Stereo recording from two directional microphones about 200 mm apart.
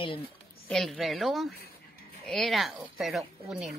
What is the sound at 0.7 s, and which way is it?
Speech, centre (ahead or behind).